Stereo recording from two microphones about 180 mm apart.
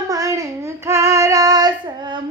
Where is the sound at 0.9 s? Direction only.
15° right (ahead or behind).